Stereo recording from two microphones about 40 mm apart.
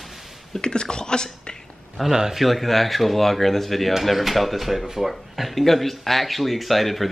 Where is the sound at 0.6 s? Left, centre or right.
Left.